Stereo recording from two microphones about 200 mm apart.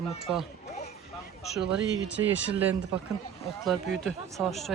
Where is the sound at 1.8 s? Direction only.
65° right (ahead or behind).